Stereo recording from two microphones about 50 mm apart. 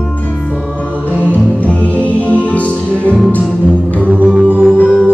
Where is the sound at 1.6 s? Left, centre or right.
Left.